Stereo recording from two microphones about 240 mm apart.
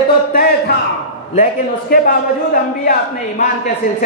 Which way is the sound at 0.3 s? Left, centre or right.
Left.